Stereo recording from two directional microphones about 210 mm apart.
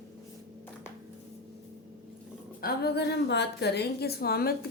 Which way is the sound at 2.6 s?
45° left (ahead or behind).